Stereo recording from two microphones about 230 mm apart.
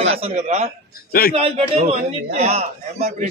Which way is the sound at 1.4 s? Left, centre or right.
Right.